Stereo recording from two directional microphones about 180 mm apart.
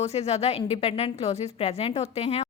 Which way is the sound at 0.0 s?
35° left (ahead or behind).